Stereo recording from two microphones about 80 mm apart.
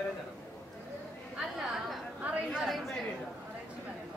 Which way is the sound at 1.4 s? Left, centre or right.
Centre.